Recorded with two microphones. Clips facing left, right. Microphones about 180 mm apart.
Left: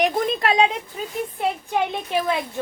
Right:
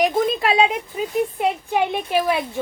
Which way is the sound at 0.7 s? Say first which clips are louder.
Right 5 dB; 15° right (ahead or behind).